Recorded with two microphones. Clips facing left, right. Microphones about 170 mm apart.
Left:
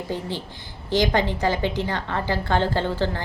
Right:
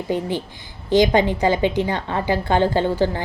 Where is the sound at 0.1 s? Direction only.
15° right (ahead or behind).